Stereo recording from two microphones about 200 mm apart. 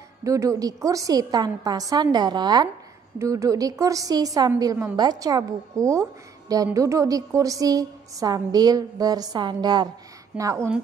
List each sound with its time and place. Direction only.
0.2 s a woman's voice: 15° right (ahead or behind)